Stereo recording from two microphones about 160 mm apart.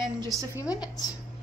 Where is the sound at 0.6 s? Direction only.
20° left (ahead or behind).